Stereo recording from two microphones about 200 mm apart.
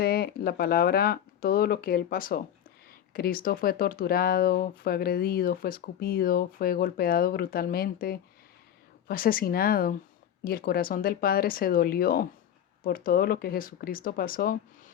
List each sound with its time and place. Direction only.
0.0 s speech: 50° left (ahead or behind)